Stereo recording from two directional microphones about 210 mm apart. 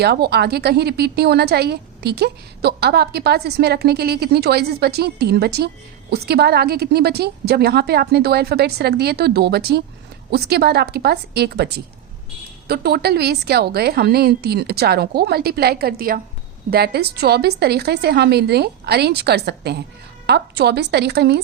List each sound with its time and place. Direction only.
0.0 s a woman's voice: 50° right (ahead or behind)